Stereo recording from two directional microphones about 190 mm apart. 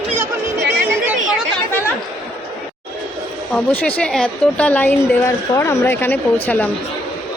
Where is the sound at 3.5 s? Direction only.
10° left (ahead or behind).